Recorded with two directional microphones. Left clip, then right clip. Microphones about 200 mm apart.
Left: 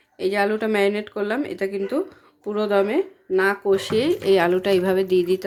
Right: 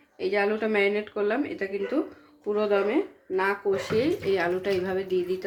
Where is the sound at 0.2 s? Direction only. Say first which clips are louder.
Left 4 dB; 45° left (ahead or behind).